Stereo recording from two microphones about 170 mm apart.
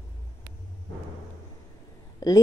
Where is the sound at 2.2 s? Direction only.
20° left (ahead or behind).